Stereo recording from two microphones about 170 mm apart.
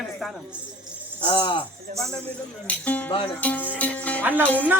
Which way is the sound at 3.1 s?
30° left (ahead or behind).